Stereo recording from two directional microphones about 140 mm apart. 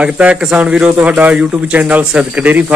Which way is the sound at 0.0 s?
10° right (ahead or behind).